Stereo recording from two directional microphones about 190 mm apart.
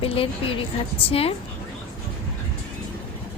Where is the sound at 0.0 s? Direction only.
30° left (ahead or behind).